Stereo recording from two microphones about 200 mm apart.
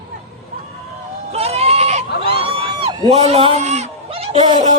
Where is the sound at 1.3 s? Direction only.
30° right (ahead or behind).